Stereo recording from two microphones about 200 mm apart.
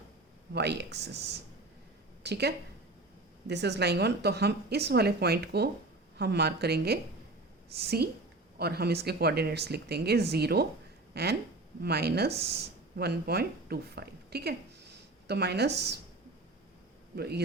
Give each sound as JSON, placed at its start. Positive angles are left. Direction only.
{"t": 0.5, "sound": "a woman's voice", "side_deg": -55}
{"t": 17.2, "sound": "speech", "side_deg": -55}